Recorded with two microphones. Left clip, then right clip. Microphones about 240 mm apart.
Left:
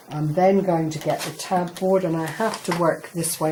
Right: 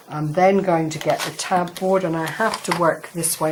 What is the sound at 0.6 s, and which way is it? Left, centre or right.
Speech, right.